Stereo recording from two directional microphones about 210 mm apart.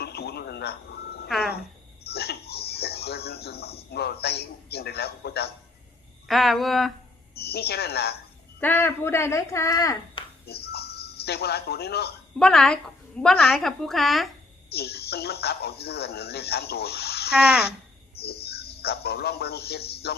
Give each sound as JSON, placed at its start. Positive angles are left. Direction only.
{"t": 0.0, "sound": "music", "side_deg": 50}
{"t": 2.0, "sound": "a sound", "side_deg": 50}
{"t": 6.2, "sound": "a woman's voice", "side_deg": 0}
{"t": 7.3, "sound": "speech", "side_deg": 50}
{"t": 8.6, "sound": "speech", "side_deg": 10}
{"t": 10.4, "sound": "speech", "side_deg": 50}
{"t": 12.4, "sound": "a woman's voice", "side_deg": 5}
{"t": 14.7, "sound": "speech", "side_deg": 50}
{"t": 17.3, "sound": "a woman's voice", "side_deg": -5}
{"t": 18.1, "sound": "a man's voice", "side_deg": 50}